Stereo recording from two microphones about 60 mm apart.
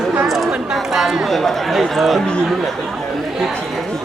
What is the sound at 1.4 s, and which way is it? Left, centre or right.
Speech, centre.